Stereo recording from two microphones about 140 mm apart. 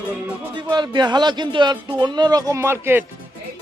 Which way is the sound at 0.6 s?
30° right (ahead or behind).